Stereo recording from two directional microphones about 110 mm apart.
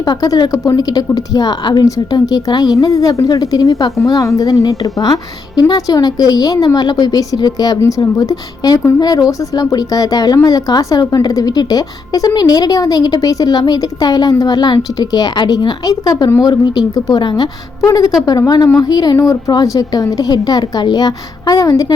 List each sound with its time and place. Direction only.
0.0 s a woman's voice: 35° left (ahead or behind)